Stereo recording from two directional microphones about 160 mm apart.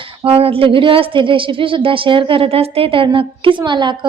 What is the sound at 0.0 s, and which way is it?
A woman's voice, 35° right (ahead or behind).